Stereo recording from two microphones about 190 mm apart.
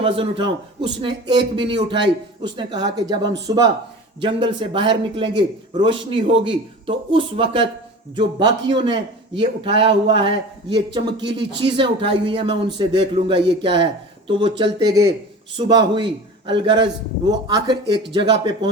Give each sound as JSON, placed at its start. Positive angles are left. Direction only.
{"t": 0.0, "sound": "speech", "side_deg": -30}
{"t": 1.5, "sound": "speech", "side_deg": -25}